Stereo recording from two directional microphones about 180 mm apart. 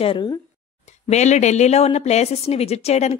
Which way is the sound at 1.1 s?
40° left (ahead or behind).